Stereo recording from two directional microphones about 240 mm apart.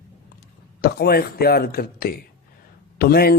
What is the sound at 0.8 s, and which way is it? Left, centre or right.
A man's voice, left.